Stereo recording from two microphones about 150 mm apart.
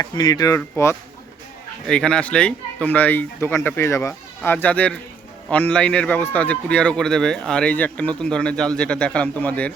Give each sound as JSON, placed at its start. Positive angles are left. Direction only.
{"t": 0.0, "sound": "speech", "side_deg": 25}
{"t": 1.9, "sound": "speech", "side_deg": 5}